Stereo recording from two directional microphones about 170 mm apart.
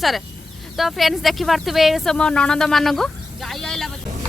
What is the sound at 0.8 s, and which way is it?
Speech, centre (ahead or behind).